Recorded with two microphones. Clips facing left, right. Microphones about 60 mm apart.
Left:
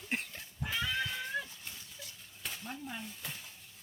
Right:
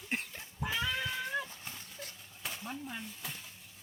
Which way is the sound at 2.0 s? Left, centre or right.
Right.